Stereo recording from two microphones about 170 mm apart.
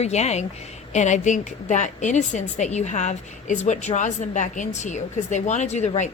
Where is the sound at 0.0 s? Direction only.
40° left (ahead or behind).